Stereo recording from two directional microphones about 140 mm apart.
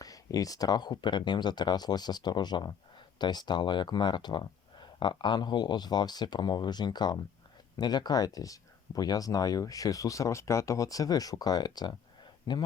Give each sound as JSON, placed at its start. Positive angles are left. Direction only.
{"t": 0.0, "sound": "speech", "side_deg": 25}